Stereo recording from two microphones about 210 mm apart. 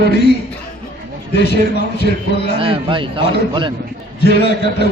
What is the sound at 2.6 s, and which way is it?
Speech, 25° right (ahead or behind).